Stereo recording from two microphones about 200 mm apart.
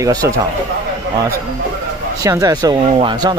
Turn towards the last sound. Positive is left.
turn(degrees=-20)  # may be behind; listen again after turning